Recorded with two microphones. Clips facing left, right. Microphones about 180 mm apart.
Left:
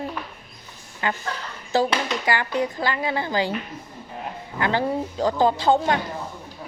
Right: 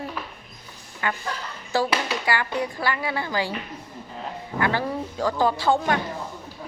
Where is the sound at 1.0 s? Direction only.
25° left (ahead or behind).